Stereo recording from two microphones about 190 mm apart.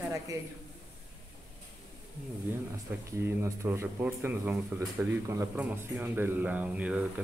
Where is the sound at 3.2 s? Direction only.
15° right (ahead or behind).